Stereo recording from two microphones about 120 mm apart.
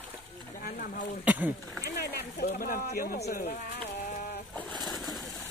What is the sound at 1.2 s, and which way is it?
Speech, 15° right (ahead or behind).